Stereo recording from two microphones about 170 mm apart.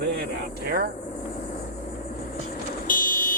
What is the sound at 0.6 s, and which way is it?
Speech, 65° right (ahead or behind).